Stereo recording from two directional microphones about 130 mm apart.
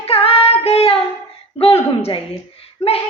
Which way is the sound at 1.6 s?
50° left (ahead or behind).